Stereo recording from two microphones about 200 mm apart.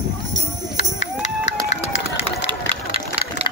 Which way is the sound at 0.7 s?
35° left (ahead or behind).